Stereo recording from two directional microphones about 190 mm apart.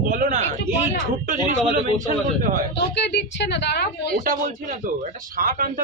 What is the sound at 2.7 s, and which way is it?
A woman's voice, 65° left (ahead or behind).